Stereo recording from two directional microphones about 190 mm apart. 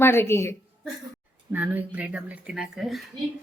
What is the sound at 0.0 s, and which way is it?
Speech, 10° left (ahead or behind).